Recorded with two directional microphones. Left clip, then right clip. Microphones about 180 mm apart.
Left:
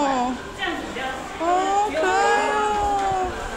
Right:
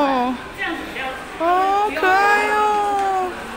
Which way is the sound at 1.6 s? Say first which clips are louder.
Right 2 dB; 15° right (ahead or behind).